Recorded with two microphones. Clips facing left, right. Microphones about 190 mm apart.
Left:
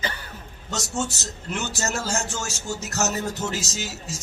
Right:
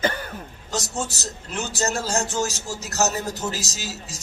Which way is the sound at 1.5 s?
35° right (ahead or behind).